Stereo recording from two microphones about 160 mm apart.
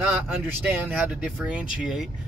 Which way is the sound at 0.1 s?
10° right (ahead or behind).